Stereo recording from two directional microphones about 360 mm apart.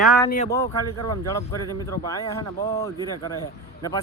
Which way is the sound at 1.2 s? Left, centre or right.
Centre.